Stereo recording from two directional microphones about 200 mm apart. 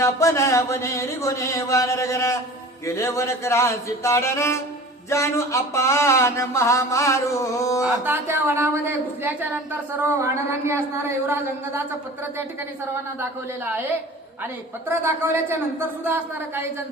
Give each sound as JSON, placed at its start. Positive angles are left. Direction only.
{"t": 0.0, "sound": "a sound", "side_deg": 15}
{"t": 8.0, "sound": "a woman's voice", "side_deg": -10}
{"t": 14.8, "sound": "a woman's voice", "side_deg": -10}